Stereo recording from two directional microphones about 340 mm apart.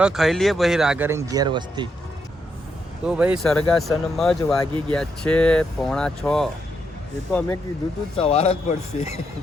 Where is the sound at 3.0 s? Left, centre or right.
Centre.